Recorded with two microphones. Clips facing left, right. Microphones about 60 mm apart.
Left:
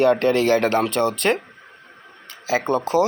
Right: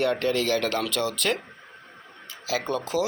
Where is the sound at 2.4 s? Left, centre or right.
Left.